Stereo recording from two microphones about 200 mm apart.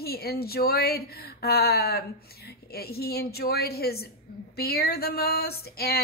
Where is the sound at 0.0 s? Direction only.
50° left (ahead or behind).